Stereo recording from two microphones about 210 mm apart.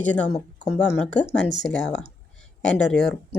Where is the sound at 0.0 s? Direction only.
5° left (ahead or behind).